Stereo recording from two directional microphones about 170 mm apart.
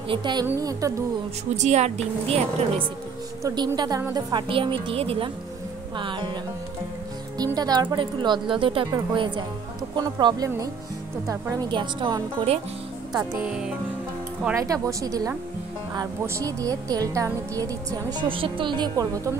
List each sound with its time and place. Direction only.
0.1 s a woman's voice: 25° right (ahead or behind)
1.6 s a woman's voice: 40° right (ahead or behind)
3.4 s a woman's voice: 25° right (ahead or behind)
7.3 s a woman's voice: 20° right (ahead or behind)
13.1 s speech: 20° right (ahead or behind)
13.4 s speech: 5° right (ahead or behind)
14.5 s a woman's voice: 20° right (ahead or behind)